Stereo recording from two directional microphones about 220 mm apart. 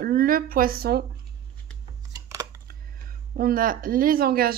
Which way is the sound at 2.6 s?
40° right (ahead or behind).